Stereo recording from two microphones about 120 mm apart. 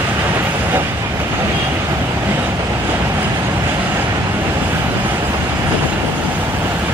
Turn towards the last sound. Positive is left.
turn(degrees=-15)  # may be behind; listen again after turning